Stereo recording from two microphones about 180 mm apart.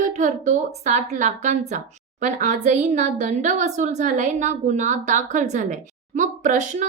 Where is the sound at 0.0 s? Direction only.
45° right (ahead or behind).